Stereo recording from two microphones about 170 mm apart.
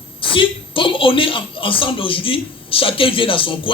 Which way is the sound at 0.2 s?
30° left (ahead or behind).